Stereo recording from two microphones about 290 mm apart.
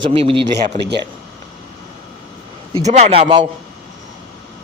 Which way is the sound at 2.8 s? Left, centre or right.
Right.